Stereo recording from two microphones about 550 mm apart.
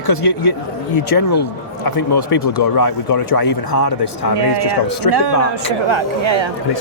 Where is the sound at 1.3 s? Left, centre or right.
Left.